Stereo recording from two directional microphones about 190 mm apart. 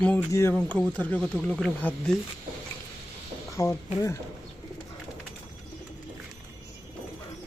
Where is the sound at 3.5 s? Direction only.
15° left (ahead or behind).